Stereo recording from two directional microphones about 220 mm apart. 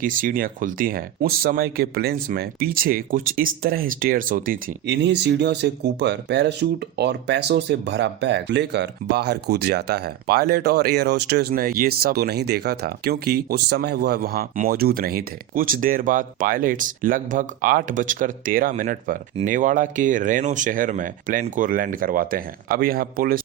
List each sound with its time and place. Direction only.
0.0 s speech: 40° right (ahead or behind)